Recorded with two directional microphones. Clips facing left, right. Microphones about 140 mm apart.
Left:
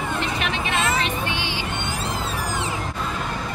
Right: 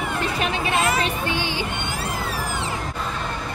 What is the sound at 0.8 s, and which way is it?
Music, 25° left (ahead or behind).